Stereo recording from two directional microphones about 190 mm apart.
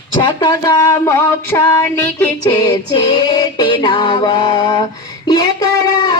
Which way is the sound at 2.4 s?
20° left (ahead or behind).